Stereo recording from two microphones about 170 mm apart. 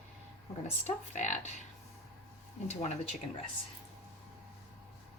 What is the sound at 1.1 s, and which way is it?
Speech, 45° left (ahead or behind).